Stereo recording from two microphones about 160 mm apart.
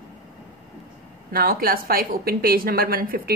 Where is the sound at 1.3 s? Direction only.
65° right (ahead or behind).